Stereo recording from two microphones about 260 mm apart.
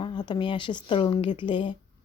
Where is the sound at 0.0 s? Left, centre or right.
Centre.